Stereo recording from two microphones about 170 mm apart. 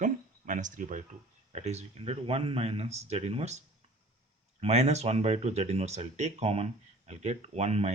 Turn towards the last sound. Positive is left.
turn(degrees=-40)  # may be behind; listen again after turning